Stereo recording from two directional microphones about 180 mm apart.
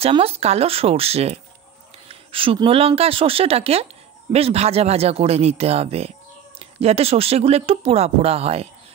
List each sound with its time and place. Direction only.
0.0 s speech: 30° right (ahead or behind)